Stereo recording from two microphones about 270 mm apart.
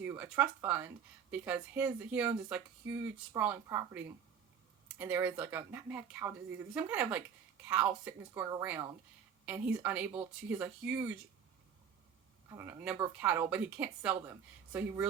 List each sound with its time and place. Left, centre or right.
0.0 s a woman's voice: centre
12.5 s speech: centre